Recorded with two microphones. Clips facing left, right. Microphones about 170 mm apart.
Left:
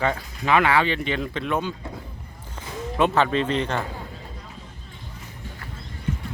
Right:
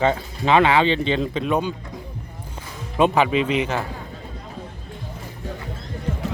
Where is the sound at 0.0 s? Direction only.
25° right (ahead or behind).